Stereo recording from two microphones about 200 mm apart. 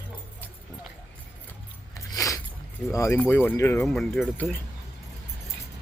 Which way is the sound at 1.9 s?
15° left (ahead or behind).